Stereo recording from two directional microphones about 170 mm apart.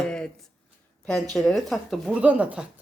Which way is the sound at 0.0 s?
5° left (ahead or behind).